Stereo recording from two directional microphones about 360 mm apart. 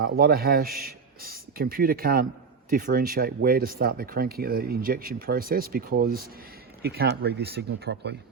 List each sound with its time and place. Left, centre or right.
0.0 s a man's voice: right